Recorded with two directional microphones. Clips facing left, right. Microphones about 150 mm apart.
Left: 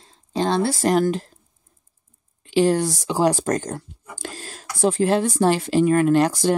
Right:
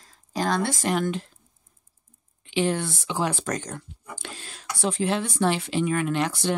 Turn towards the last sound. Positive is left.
turn(degrees=40)  # may be behind; listen again after turning